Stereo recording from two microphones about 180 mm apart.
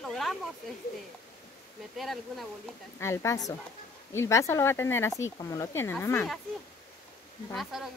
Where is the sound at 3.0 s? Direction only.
15° left (ahead or behind).